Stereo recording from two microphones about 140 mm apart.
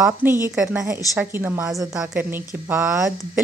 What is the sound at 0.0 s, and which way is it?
A woman's voice, 15° right (ahead or behind).